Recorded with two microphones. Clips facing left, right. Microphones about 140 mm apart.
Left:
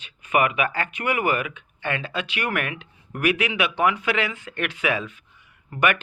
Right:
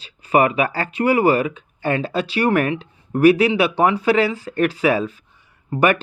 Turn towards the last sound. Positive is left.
turn(degrees=-35)  # may be behind; listen again after turning